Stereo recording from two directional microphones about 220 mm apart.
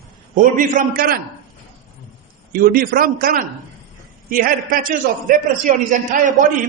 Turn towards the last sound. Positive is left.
turn(degrees=-35)  # may be behind; listen again after turning